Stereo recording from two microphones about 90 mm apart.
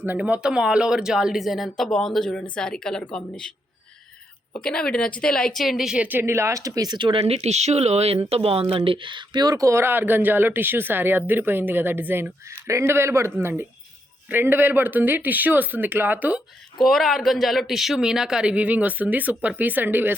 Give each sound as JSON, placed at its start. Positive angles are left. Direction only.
{"t": 0.2, "sound": "a woman's voice", "side_deg": -10}
{"t": 4.5, "sound": "a woman's voice", "side_deg": 10}
{"t": 6.1, "sound": "speech", "side_deg": -25}
{"t": 8.1, "sound": "speech", "side_deg": -90}
{"t": 12.5, "sound": "speech", "side_deg": -35}
{"t": 16.8, "sound": "speech", "side_deg": 0}